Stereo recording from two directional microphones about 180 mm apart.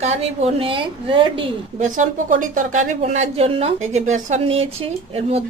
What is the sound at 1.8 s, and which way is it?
Speech, 45° right (ahead or behind).